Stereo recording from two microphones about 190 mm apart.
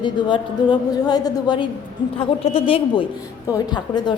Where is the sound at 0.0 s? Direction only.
25° left (ahead or behind).